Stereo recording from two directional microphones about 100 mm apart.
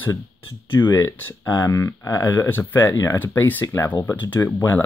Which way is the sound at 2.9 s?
30° left (ahead or behind).